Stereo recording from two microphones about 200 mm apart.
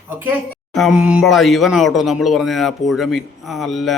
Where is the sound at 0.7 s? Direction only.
Centre (ahead or behind).